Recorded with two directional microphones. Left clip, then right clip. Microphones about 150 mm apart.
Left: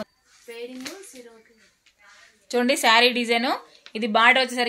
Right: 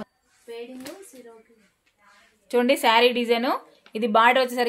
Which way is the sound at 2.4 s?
50° right (ahead or behind).